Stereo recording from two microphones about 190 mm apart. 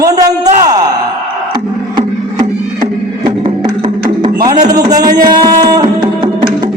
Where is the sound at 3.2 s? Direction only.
25° right (ahead or behind).